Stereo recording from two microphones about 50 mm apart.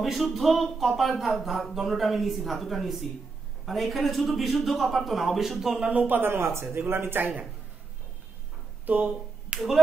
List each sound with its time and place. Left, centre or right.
0.0 s speech: centre
5.9 s speech: right
9.5 s speech: right